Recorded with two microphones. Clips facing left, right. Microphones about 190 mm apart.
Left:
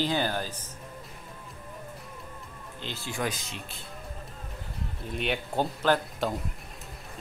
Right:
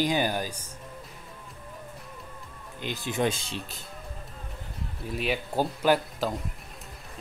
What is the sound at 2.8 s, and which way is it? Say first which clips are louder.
Speech: right 5 dB; 15° right (ahead or behind).